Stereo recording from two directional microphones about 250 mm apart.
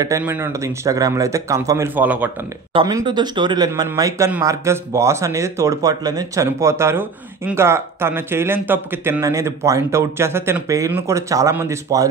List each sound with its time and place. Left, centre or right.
0.0 s speech: centre
2.7 s speech: centre